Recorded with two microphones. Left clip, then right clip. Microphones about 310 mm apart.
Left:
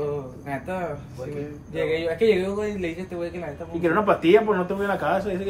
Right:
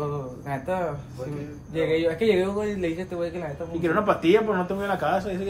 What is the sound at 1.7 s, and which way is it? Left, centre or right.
Speech, right.